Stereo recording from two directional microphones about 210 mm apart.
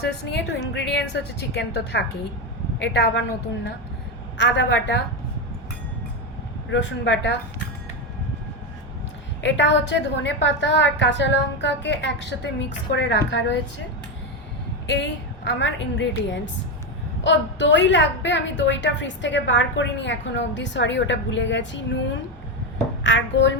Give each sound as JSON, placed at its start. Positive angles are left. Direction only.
{"t": 0.0, "sound": "a woman's voice", "side_deg": 55}
{"t": 4.4, "sound": "a woman's voice", "side_deg": 55}
{"t": 6.7, "sound": "a woman's voice", "side_deg": 60}
{"t": 9.4, "sound": "a woman's voice", "side_deg": 60}
{"t": 14.8, "sound": "a woman's voice", "side_deg": 55}
{"t": 23.0, "sound": "a woman's voice", "side_deg": 60}